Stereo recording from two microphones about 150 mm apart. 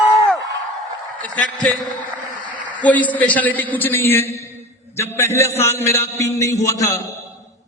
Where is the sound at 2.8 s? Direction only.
10° left (ahead or behind).